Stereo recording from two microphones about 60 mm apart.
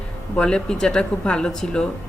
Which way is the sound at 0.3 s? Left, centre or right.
Centre.